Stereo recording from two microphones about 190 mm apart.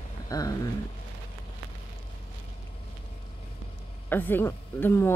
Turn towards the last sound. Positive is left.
turn(degrees=15)  # may be behind; listen again after turning